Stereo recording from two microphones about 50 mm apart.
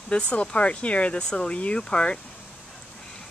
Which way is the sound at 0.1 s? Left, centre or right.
Left.